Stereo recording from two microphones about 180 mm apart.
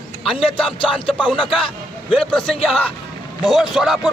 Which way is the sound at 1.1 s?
5° right (ahead or behind).